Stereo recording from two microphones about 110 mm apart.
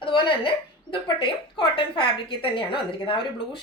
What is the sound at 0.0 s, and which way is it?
A woman's voice, 50° left (ahead or behind).